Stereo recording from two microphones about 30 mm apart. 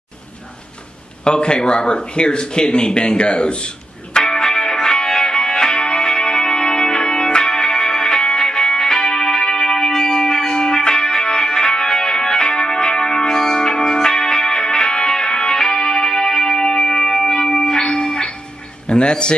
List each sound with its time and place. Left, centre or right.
1.2 s speech: left
4.1 s music: left
18.9 s a sound: left